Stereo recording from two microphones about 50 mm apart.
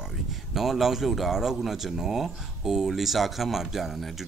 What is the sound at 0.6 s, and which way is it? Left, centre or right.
Speech, centre.